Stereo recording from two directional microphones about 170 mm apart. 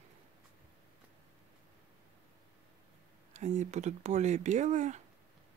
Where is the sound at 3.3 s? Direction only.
45° right (ahead or behind).